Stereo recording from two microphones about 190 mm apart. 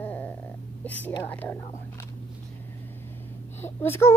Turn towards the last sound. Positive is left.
turn(degrees=10)  # may be behind; listen again after turning